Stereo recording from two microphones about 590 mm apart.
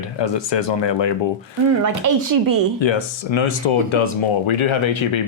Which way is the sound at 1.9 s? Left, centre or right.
Right.